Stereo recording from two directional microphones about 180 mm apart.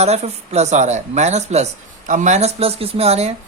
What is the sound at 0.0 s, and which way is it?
Speech, 35° right (ahead or behind).